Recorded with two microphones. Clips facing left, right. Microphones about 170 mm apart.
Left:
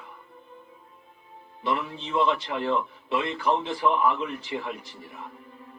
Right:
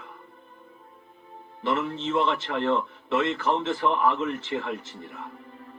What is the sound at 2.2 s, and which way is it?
Speech, 15° left (ahead or behind).